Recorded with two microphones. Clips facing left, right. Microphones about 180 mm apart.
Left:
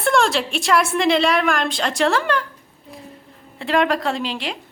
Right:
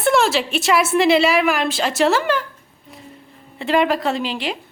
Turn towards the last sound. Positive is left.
turn(degrees=0)  # may be behind; listen again after turning